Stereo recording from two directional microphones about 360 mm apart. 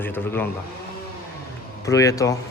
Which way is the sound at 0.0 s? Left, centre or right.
Centre.